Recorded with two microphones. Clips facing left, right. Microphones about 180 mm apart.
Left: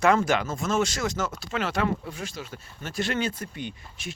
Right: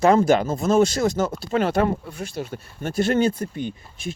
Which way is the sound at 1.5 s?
50° right (ahead or behind).